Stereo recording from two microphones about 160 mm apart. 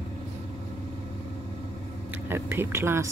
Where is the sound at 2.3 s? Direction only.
15° right (ahead or behind).